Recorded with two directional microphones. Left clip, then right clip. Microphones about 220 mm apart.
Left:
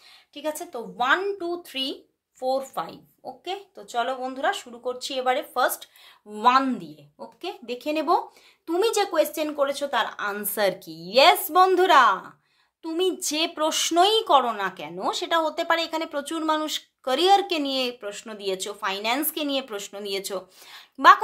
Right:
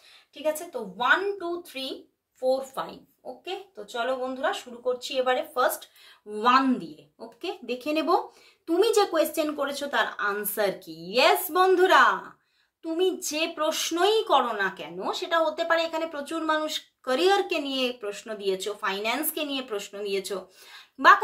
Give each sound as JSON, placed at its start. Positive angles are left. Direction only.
{"t": 0.9, "sound": "speech", "side_deg": 50}
{"t": 6.3, "sound": "speech", "side_deg": 25}